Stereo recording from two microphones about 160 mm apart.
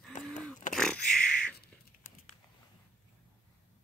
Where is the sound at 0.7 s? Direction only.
5° left (ahead or behind).